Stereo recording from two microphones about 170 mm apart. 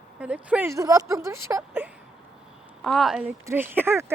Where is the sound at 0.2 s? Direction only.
10° right (ahead or behind).